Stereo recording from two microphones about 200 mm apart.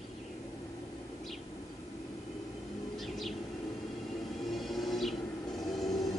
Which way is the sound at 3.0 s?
Centre (ahead or behind).